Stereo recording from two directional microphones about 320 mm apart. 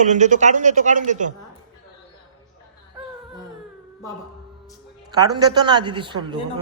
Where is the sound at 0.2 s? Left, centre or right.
Right.